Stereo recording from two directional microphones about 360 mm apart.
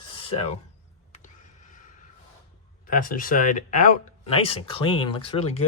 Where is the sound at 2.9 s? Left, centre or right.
Left.